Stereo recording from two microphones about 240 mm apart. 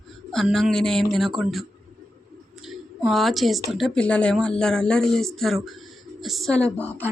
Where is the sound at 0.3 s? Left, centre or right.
Centre.